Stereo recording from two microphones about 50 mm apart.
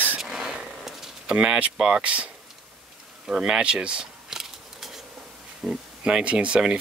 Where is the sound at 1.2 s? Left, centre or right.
Right.